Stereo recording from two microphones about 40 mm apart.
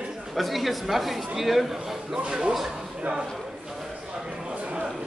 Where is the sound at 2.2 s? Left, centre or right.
Right.